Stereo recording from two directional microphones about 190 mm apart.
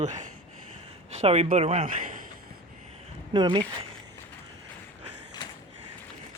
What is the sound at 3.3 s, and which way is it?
Speech, 25° right (ahead or behind).